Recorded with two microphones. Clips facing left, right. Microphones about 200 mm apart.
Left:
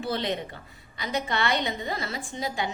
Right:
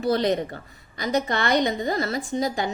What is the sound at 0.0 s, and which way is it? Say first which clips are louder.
A woman's voice: right 7 dB; 40° right (ahead or behind).